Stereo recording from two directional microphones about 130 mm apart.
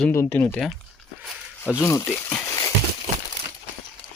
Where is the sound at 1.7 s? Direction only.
25° left (ahead or behind).